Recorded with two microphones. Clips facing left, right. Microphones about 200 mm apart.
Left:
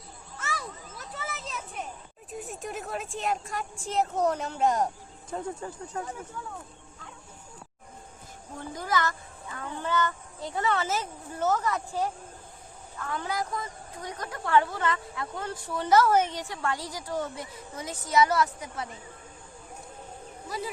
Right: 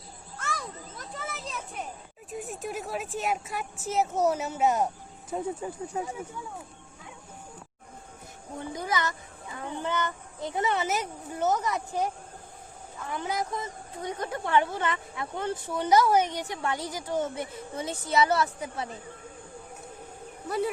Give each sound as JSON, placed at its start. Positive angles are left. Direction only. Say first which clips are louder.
{"t": 0.3, "sound": "children playing", "louder": "right 1 dB", "side_deg": 5}
{"t": 2.3, "sound": "speech", "louder": "right 2 dB", "side_deg": 0}
{"t": 8.5, "sound": "speech", "louder": "left 1 dB", "side_deg": -20}